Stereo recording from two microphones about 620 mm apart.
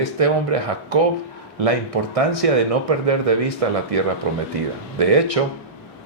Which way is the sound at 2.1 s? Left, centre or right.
Right.